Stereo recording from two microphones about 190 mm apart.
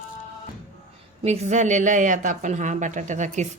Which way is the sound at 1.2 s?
35° right (ahead or behind).